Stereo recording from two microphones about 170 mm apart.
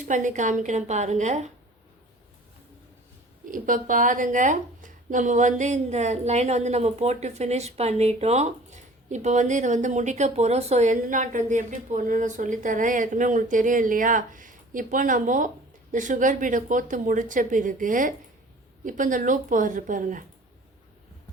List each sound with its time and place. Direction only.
0.1 s speech: 45° right (ahead or behind)
3.5 s speech: 50° right (ahead or behind)